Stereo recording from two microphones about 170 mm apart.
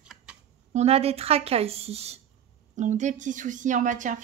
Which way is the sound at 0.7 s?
40° right (ahead or behind).